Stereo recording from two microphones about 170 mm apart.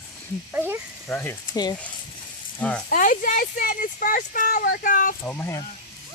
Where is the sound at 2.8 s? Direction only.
50° left (ahead or behind).